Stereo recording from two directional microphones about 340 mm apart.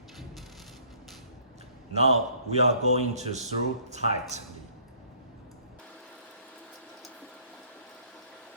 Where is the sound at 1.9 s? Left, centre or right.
Centre.